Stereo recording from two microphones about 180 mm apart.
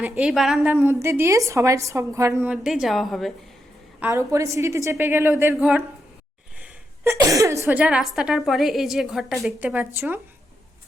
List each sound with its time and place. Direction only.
0.0 s a woman's voice: 5° right (ahead or behind)
2.5 s speech: 5° right (ahead or behind)
4.0 s a woman's voice: 15° right (ahead or behind)